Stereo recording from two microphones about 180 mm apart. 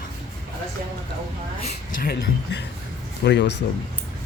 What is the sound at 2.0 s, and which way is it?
Speech, 65° left (ahead or behind).